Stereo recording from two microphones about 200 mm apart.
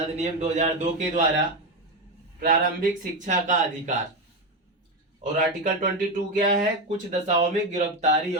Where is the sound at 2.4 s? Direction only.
45° right (ahead or behind).